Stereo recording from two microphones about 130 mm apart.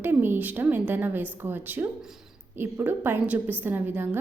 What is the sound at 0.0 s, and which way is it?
A woman's voice, 15° right (ahead or behind).